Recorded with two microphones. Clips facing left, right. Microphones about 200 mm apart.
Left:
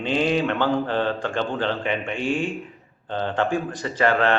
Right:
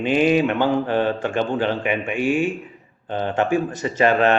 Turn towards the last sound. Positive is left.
turn(degrees=-20)  # may be behind; listen again after turning